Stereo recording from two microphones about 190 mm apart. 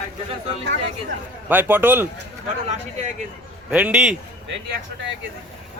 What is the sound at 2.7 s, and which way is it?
Speech, 35° right (ahead or behind).